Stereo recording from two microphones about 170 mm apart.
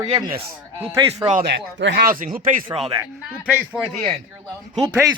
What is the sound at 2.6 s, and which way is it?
Speech, 30° right (ahead or behind).